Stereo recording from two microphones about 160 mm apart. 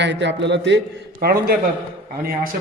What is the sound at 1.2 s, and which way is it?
Speech, 75° right (ahead or behind).